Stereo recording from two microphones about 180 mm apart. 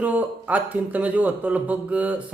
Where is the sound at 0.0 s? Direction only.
10° right (ahead or behind).